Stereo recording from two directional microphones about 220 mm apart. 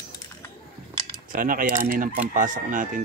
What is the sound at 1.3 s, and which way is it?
Speech, 40° right (ahead or behind).